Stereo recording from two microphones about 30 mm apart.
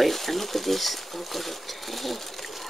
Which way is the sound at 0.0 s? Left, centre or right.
Centre.